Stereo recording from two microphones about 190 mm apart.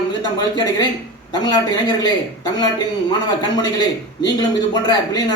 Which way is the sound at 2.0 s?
20° left (ahead or behind).